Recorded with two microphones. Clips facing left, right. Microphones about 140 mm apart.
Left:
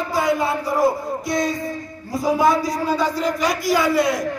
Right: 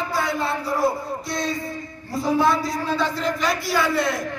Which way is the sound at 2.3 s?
15° left (ahead or behind).